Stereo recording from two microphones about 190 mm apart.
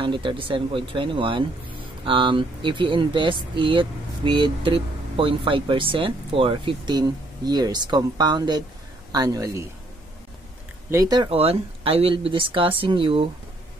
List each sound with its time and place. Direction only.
0.0 s speech: 25° right (ahead or behind)
10.9 s speech: 20° right (ahead or behind)